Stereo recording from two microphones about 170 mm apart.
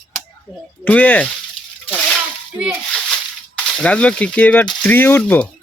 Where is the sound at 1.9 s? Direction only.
5° left (ahead or behind).